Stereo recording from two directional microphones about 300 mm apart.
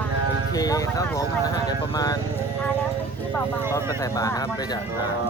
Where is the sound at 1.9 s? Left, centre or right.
Centre.